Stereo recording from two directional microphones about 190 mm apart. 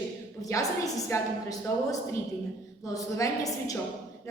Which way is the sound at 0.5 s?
15° left (ahead or behind).